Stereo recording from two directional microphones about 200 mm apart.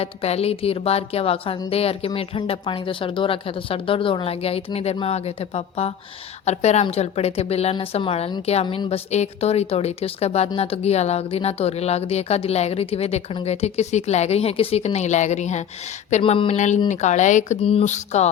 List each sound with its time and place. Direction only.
0.0 s a woman's voice: 30° left (ahead or behind)